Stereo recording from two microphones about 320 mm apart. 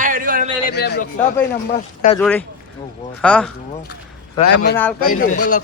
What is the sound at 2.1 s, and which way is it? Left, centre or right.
Speech, centre.